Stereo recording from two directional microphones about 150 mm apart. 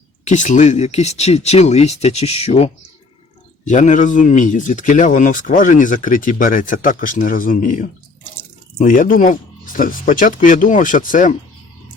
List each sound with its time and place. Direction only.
0.3 s speech: 55° left (ahead or behind)
3.7 s a man's voice: 55° left (ahead or behind)